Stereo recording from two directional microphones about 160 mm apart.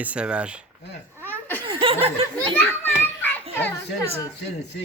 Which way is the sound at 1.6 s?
35° right (ahead or behind).